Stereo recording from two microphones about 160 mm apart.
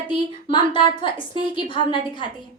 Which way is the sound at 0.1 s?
30° left (ahead or behind).